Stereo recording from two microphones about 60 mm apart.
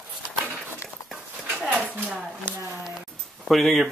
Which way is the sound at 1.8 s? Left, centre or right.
Right.